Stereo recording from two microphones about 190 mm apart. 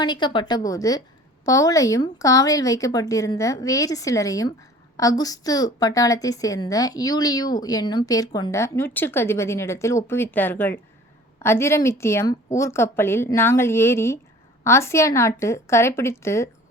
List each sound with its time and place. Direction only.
0.0 s a woman's voice: 25° left (ahead or behind)